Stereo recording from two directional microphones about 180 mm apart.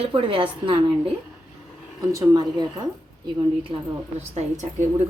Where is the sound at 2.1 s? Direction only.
20° right (ahead or behind).